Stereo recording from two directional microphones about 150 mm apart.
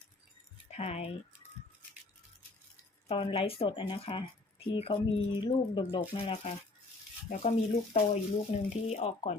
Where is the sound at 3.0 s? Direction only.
40° left (ahead or behind).